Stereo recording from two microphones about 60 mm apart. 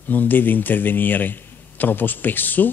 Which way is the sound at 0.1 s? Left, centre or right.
Left.